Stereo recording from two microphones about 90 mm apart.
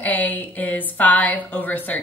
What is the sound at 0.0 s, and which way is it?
Speech, 15° left (ahead or behind).